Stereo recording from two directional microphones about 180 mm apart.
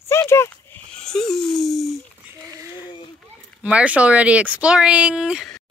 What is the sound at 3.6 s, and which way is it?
Speech, 5° right (ahead or behind).